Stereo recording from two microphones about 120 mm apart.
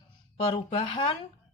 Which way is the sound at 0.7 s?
55° left (ahead or behind).